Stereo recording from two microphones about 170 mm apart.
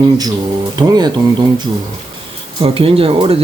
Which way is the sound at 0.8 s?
25° right (ahead or behind).